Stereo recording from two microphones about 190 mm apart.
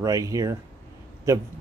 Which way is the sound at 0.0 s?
20° right (ahead or behind).